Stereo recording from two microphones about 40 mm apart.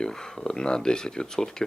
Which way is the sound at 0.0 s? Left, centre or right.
Centre.